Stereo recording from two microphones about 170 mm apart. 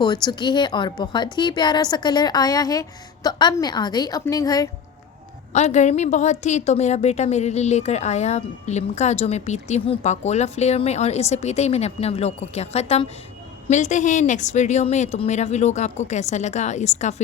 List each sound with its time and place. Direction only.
0.0 s a woman's voice: 25° left (ahead or behind)
5.5 s a woman's voice: 40° left (ahead or behind)